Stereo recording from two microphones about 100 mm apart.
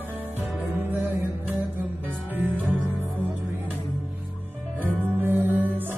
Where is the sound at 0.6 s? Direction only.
20° right (ahead or behind).